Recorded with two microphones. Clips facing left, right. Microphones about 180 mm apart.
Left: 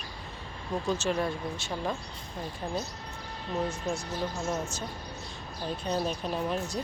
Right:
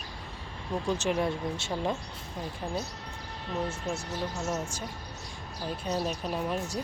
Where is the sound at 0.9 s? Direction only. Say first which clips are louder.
Right 1 dB; 15° right (ahead or behind).